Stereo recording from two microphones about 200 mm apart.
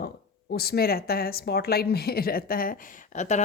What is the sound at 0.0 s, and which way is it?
A woman's voice, 50° left (ahead or behind).